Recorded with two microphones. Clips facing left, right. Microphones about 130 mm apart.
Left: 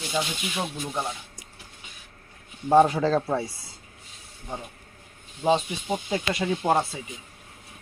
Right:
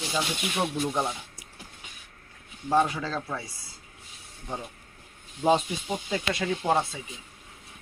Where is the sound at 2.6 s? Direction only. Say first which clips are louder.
Left 6 dB; 30° left (ahead or behind).